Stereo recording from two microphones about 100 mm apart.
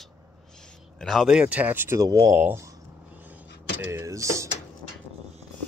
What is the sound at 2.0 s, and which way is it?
Speech, 40° right (ahead or behind).